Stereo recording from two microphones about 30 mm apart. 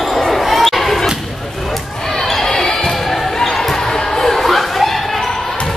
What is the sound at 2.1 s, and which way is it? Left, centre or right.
Basketball bounce, centre.